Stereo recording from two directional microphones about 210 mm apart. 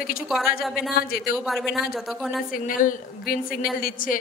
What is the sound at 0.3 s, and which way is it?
Speech, centre (ahead or behind).